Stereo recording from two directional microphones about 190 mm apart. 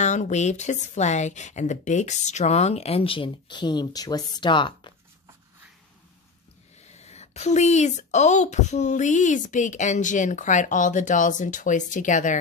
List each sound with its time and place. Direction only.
0.0 s speech: 40° left (ahead or behind)
6.8 s speech: 35° left (ahead or behind)